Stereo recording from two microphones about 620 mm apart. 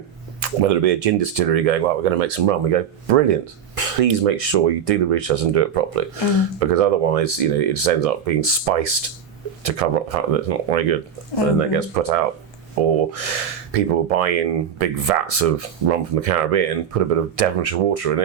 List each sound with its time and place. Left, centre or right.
0.3 s speech: right